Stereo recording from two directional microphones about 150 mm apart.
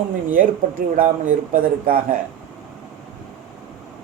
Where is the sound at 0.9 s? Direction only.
65° right (ahead or behind).